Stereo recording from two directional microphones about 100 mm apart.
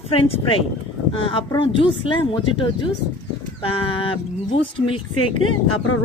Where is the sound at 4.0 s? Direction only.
60° left (ahead or behind).